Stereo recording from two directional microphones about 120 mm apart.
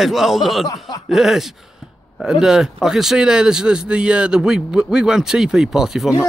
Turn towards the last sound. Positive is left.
turn(degrees=-5)  # may be behind; listen again after turning